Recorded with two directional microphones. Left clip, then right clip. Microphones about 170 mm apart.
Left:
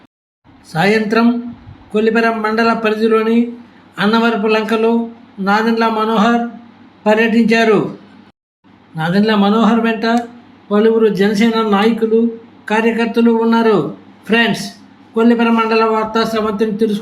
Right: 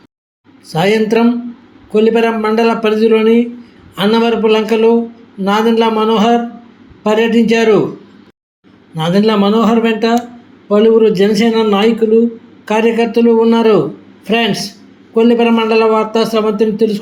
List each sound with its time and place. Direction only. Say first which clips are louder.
0.7 s speech: right 2 dB; 15° right (ahead or behind)
9.0 s speech: right 2 dB; 20° right (ahead or behind)